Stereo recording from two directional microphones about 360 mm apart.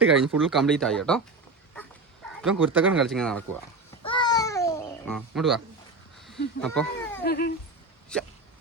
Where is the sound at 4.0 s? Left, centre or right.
Centre.